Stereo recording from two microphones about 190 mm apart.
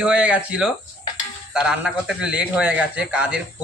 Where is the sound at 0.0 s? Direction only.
5° right (ahead or behind).